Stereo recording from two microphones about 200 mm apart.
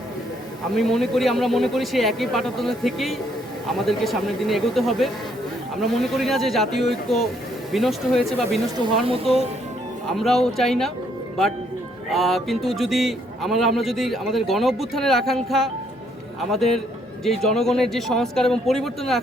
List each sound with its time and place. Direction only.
0.8 s a man's voice: centre (ahead or behind)
8.7 s speech: 25° right (ahead or behind)
10.1 s a man's voice: centre (ahead or behind)
12.1 s a man's voice: centre (ahead or behind)
17.2 s a man's voice: centre (ahead or behind)